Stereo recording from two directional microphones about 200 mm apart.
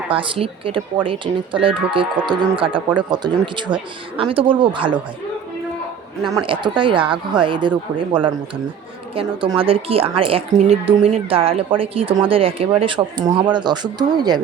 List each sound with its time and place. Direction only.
0.1 s a woman's voice: 25° right (ahead or behind)
6.3 s a woman's voice: 25° right (ahead or behind)